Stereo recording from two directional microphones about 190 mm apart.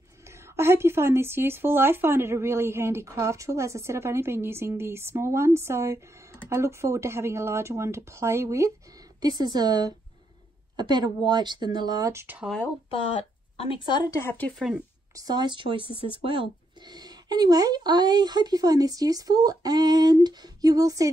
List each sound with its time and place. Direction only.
0.2 s speech: 15° right (ahead or behind)
12.9 s a woman's voice: 30° left (ahead or behind)
14.2 s speech: 10° left (ahead or behind)
15.1 s speech: 20° right (ahead or behind)